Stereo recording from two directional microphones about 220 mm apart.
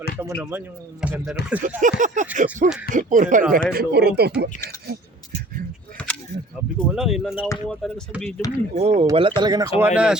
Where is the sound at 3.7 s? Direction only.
45° right (ahead or behind).